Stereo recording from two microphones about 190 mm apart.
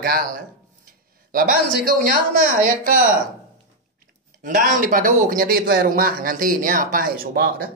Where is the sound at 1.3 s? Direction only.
50° right (ahead or behind).